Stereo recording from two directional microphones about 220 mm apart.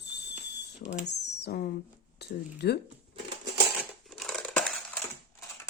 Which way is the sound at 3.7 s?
Centre (ahead or behind).